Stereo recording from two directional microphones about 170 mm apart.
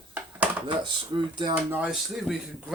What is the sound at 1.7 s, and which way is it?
Speech, 5° right (ahead or behind).